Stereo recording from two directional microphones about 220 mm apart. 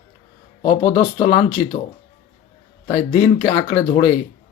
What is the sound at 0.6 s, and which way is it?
Speech, 25° left (ahead or behind).